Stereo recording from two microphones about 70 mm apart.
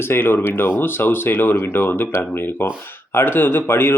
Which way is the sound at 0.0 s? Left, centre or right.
Left.